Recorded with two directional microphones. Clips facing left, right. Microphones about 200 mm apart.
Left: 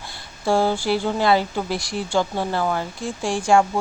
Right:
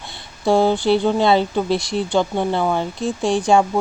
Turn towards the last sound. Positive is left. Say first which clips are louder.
# right 2 dB
turn(degrees=-20)  # may be behind; listen again after turning